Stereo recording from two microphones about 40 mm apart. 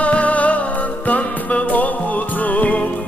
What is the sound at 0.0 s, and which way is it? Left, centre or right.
Music, left.